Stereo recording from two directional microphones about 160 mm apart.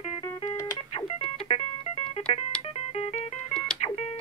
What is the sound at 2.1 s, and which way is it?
Music, 35° left (ahead or behind).